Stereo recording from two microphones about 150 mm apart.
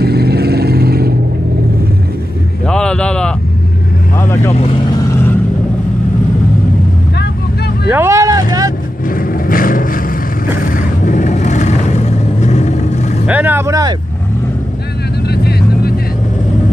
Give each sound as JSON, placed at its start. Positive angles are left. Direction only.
{"t": 0.0, "sound": "vehicle", "side_deg": -90}
{"t": 2.6, "sound": "a sound", "side_deg": 5}
{"t": 4.2, "sound": "vehicle", "side_deg": 15}
{"t": 4.6, "sound": "speech", "side_deg": 35}
{"t": 4.9, "sound": "vehicle", "side_deg": 20}
{"t": 7.9, "sound": "vehicle", "side_deg": -20}
{"t": 9.1, "sound": "vehicle", "side_deg": 70}
{"t": 13.3, "sound": "vehicle", "side_deg": -10}
{"t": 15.2, "sound": "vehicle", "side_deg": 90}